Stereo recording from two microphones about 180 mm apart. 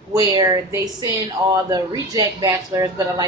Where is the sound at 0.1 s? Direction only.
20° right (ahead or behind).